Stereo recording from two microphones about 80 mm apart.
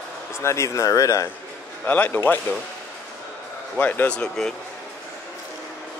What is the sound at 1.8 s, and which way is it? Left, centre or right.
Speech, centre.